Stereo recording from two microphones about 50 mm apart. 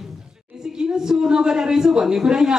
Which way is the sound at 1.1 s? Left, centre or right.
Centre.